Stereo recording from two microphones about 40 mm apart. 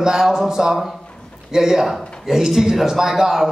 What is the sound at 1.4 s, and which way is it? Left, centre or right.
Speech, centre.